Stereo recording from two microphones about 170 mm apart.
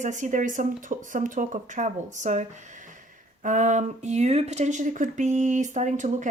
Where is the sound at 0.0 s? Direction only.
45° right (ahead or behind).